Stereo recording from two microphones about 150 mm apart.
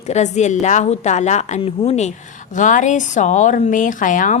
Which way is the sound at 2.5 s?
60° left (ahead or behind).